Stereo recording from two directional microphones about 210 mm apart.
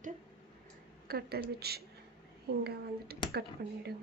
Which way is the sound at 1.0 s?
45° right (ahead or behind).